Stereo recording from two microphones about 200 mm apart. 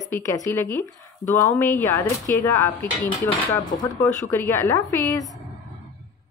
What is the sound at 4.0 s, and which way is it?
Speech, 10° left (ahead or behind).